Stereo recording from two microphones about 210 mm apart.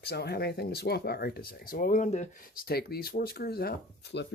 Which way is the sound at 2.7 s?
50° left (ahead or behind).